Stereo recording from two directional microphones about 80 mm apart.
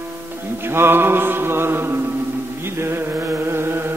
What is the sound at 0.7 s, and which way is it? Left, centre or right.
Mantra, right.